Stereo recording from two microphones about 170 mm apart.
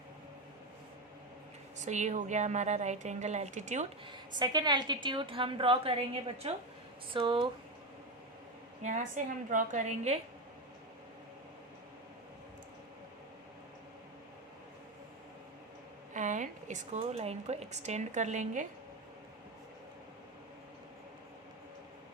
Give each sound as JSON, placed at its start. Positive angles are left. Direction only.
{"t": 1.8, "sound": "speech", "side_deg": -45}
{"t": 4.4, "sound": "a woman's voice", "side_deg": -25}
{"t": 8.8, "sound": "speech", "side_deg": -45}
{"t": 16.1, "sound": "speech", "side_deg": -45}